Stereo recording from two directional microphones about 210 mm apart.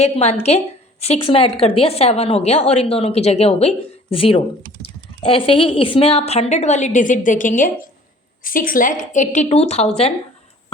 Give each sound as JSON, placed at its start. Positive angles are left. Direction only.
{"t": 0.0, "sound": "a woman's voice", "side_deg": 30}
{"t": 5.5, "sound": "a woman's voice", "side_deg": 25}